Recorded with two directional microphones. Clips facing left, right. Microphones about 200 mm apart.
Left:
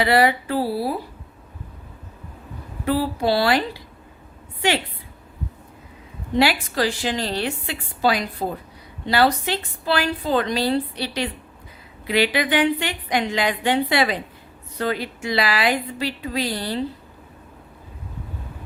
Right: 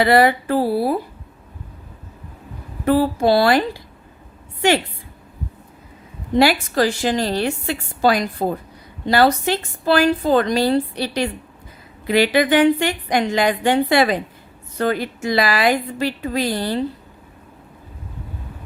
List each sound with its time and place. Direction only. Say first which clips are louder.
0.0 s a woman's voice: right 4 dB; 45° right (ahead or behind)
2.8 s a woman's voice: right 5 dB; 50° right (ahead or behind)
6.4 s a woman's voice: right 4 dB; 45° right (ahead or behind)